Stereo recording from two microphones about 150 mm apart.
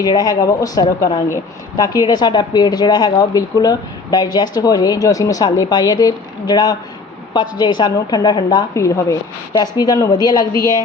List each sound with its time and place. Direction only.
0.0 s a woman's voice: 25° left (ahead or behind)